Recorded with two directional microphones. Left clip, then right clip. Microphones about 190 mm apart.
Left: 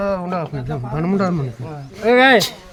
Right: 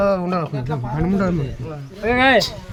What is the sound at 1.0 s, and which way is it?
Speech, 30° left (ahead or behind).